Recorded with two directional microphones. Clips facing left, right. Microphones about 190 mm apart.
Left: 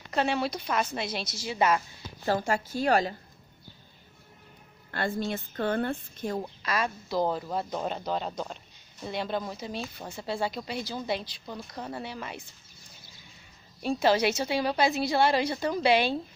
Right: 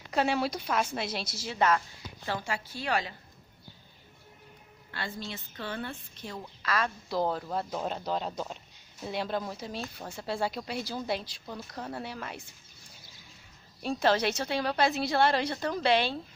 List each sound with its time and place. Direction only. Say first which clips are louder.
0.1 s a woman's voice: even; 5° right (ahead or behind)
2.2 s a woman's voice: left 7 dB; 45° left (ahead or behind)
4.9 s a woman's voice: left 8 dB; 50° left (ahead or behind)
6.6 s a woman's voice: right 1 dB; 15° left (ahead or behind)
7.1 s speech: left 2 dB; 5° left (ahead or behind)
13.8 s a woman's voice: left 2 dB; 5° left (ahead or behind)